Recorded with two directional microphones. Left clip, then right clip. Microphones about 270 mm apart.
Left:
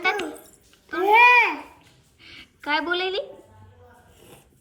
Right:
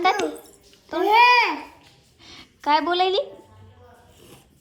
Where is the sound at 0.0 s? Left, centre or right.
Centre.